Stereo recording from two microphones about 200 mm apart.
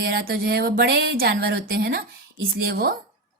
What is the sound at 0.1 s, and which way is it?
A woman's voice, 50° right (ahead or behind).